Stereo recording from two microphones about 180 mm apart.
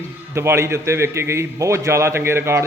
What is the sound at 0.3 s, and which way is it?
A man's voice, 15° right (ahead or behind).